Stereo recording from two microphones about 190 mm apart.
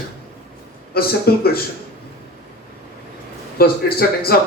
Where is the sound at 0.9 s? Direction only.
55° left (ahead or behind).